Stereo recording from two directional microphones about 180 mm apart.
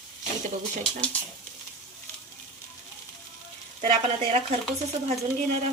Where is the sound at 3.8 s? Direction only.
30° right (ahead or behind).